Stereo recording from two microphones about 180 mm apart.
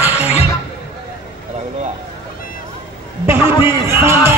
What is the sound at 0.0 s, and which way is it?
Music, 10° right (ahead or behind).